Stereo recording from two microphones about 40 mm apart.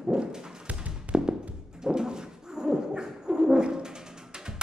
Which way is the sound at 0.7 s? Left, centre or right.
Right.